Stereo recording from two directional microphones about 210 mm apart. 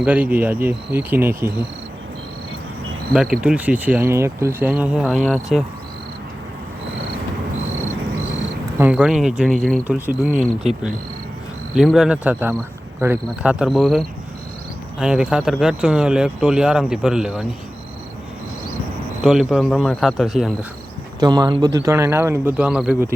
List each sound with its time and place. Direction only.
0.0 s speech: 5° right (ahead or behind)
3.1 s speech: 5° right (ahead or behind)
8.8 s speech: 5° right (ahead or behind)
11.7 s speech: centre (ahead or behind)
19.2 s speech: centre (ahead or behind)
21.2 s speech: 20° right (ahead or behind)